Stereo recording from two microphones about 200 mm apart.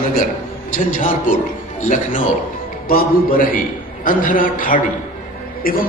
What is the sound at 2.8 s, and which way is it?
A man's voice, 45° left (ahead or behind).